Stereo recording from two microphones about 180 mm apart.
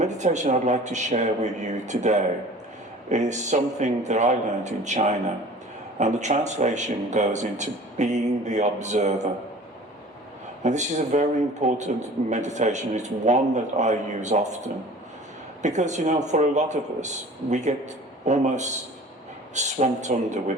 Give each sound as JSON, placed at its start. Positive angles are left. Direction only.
{"t": 0.0, "sound": "a man's voice", "side_deg": -40}
{"t": 10.6, "sound": "a man's voice", "side_deg": -40}